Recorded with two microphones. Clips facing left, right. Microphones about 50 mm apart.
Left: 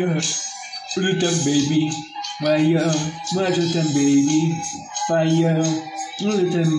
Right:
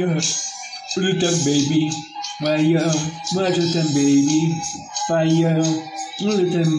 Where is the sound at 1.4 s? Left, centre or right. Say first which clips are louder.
Right 1 dB; centre.